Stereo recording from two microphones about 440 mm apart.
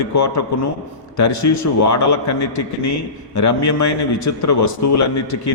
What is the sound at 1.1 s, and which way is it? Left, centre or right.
A man's voice, left.